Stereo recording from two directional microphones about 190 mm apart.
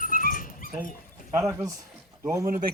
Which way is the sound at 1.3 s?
15° right (ahead or behind).